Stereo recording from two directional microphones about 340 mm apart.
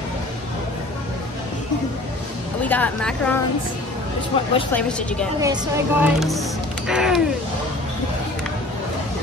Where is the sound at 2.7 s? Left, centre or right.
Centre.